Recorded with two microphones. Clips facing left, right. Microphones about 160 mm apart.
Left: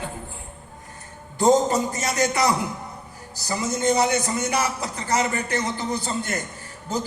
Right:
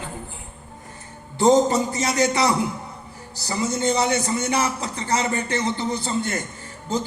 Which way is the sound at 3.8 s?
30° right (ahead or behind).